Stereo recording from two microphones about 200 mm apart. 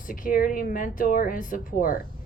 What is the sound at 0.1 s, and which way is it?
A woman's voice, 45° left (ahead or behind).